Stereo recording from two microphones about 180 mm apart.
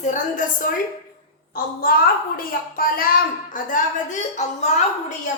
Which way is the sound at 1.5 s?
55° left (ahead or behind).